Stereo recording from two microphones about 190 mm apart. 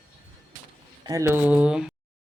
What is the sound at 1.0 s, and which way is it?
Speech, 15° right (ahead or behind).